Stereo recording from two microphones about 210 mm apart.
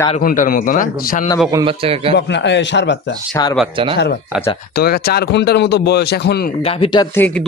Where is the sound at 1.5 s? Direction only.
25° right (ahead or behind).